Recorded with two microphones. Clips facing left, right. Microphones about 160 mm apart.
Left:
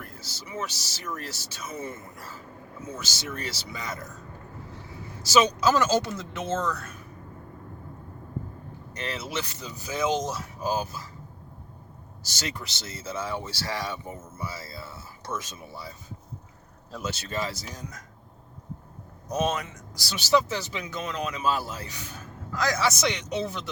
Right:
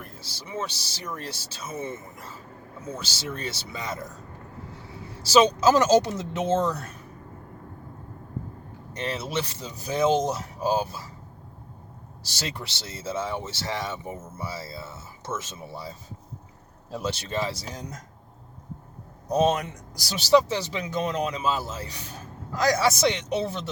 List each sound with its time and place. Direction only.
0.3 s speech: 30° right (ahead or behind)
5.2 s speech: 30° right (ahead or behind)
9.0 s speech: 30° right (ahead or behind)
12.3 s speech: 30° right (ahead or behind)
19.3 s speech: 35° right (ahead or behind)
21.4 s speech: 20° right (ahead or behind)